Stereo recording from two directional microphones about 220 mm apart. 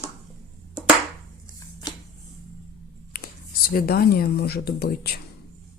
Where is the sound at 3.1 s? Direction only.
40° left (ahead or behind).